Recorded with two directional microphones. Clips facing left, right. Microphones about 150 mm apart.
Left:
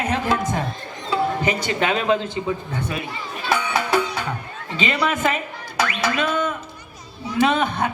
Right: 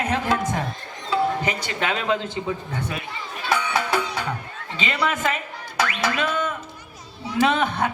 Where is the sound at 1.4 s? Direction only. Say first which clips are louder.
Left 4 dB; 20° left (ahead or behind).